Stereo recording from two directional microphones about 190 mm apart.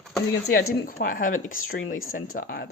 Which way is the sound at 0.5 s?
50° left (ahead or behind).